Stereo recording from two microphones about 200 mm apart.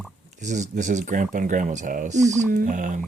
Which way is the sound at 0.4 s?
35° right (ahead or behind).